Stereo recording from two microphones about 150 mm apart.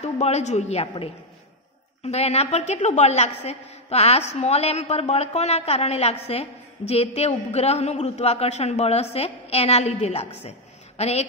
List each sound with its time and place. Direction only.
0.0 s a woman's voice: 45° left (ahead or behind)